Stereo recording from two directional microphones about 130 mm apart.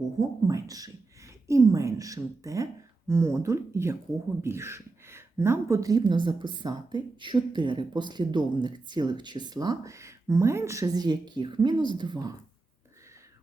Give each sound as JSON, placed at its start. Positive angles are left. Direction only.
{"t": 0.2, "sound": "a woman's voice", "side_deg": -25}